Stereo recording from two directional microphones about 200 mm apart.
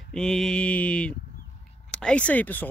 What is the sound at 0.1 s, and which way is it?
Speech, 5° left (ahead or behind).